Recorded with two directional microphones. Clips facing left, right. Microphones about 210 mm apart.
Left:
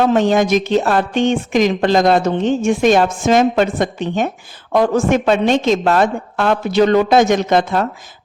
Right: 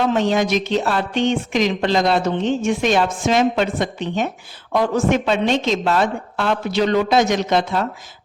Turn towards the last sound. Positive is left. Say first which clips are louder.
# left 4 dB
turn(degrees=50)  # may be behind; listen again after turning